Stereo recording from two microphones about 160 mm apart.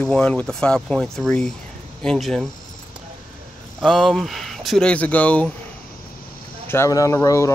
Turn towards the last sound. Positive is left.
turn(degrees=20)  # may be behind; listen again after turning